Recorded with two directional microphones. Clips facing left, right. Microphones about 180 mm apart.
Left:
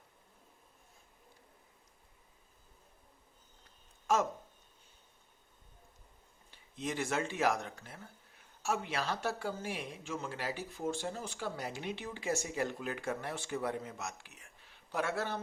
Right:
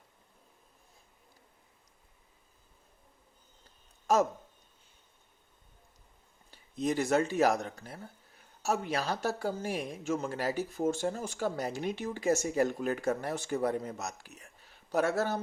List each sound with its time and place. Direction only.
4.0 s speech: 40° right (ahead or behind)
6.5 s speech: 40° right (ahead or behind)